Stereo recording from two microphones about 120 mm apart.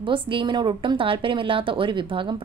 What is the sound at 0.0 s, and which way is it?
Speech, 45° right (ahead or behind).